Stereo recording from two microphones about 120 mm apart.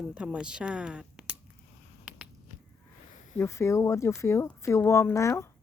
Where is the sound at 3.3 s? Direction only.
20° left (ahead or behind).